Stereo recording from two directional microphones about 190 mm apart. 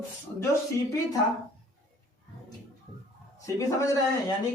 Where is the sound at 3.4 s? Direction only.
15° left (ahead or behind).